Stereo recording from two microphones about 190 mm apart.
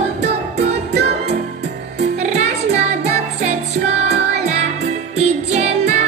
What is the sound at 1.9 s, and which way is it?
Music, 35° right (ahead or behind).